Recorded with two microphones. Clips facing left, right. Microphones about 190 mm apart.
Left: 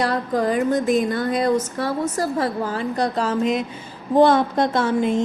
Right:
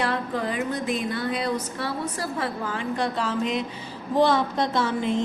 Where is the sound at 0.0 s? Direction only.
40° left (ahead or behind).